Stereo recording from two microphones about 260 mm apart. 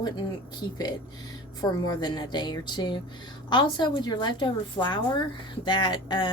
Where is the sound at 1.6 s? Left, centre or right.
Centre.